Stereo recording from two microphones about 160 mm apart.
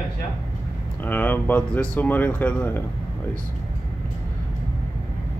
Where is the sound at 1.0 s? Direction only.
10° left (ahead or behind).